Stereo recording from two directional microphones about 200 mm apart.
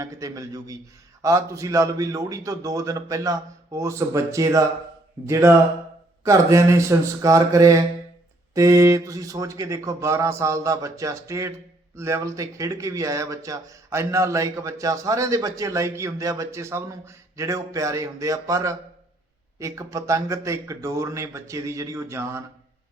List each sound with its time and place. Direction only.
0.0 s speech: 15° right (ahead or behind)